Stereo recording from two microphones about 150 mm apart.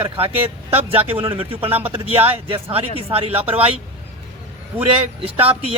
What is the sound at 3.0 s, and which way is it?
Speech, 40° right (ahead or behind).